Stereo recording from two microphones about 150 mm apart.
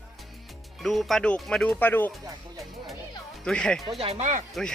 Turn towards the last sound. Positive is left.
turn(degrees=-55)  # may be behind; listen again after turning